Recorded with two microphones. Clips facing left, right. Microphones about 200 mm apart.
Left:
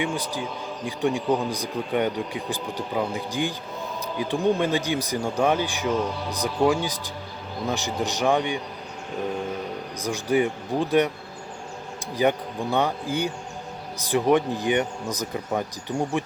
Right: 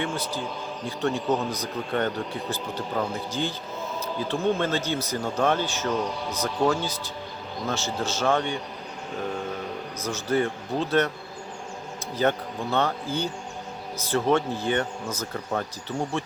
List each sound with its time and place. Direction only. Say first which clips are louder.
0.0 s speech: left 2 dB; 15° left (ahead or behind)
10.0 s speech: left 3 dB; 15° left (ahead or behind)
12.1 s speech: left 2 dB; 15° left (ahead or behind)